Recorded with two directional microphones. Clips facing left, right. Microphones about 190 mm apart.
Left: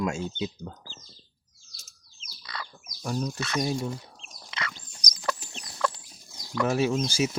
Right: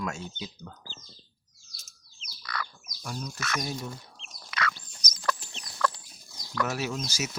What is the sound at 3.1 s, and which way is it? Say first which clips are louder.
Speech: left 6 dB; 35° left (ahead or behind).